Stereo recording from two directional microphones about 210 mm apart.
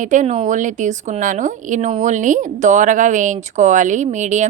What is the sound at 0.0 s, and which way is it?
Speech, 35° right (ahead or behind).